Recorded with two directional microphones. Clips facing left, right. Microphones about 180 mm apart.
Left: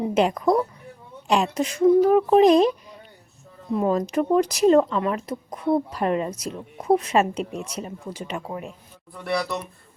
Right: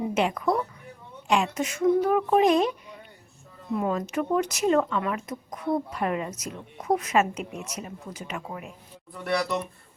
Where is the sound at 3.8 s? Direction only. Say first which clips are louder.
Left 5 dB; 35° left (ahead or behind).